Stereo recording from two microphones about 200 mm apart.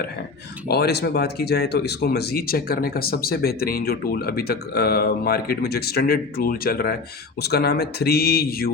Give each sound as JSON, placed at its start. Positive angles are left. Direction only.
{"t": 0.7, "sound": "speech", "side_deg": 55}